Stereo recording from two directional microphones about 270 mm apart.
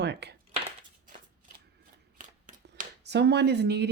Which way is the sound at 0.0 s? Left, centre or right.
Right.